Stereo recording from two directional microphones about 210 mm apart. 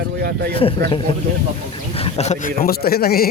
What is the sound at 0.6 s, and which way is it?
Speech, 25° left (ahead or behind).